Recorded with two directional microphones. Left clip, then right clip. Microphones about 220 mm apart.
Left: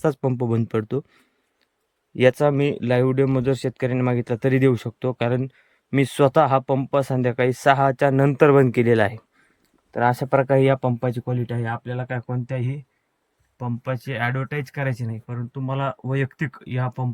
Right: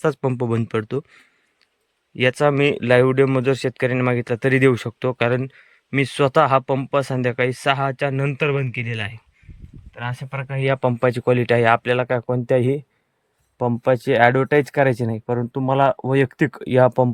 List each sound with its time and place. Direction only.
0.0 s speech: 10° left (ahead or behind)
11.5 s speech: 15° right (ahead or behind)